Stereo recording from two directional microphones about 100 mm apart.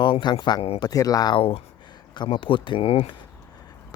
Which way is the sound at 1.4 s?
70° left (ahead or behind).